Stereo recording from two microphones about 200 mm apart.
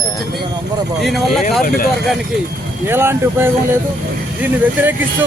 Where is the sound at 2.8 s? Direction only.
10° right (ahead or behind).